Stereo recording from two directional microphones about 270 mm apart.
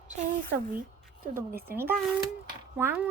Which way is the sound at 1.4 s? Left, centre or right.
Right.